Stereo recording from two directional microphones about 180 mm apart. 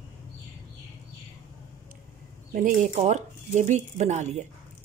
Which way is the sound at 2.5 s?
45° right (ahead or behind).